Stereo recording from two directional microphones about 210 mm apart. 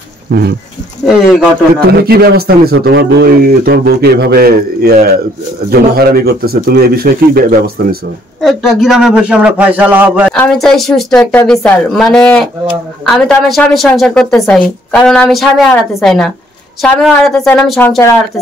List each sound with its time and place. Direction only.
0.3 s a man's voice: 50° right (ahead or behind)
1.0 s a woman's voice: centre (ahead or behind)
1.9 s a man's voice: 50° right (ahead or behind)
8.4 s a woman's voice: centre (ahead or behind)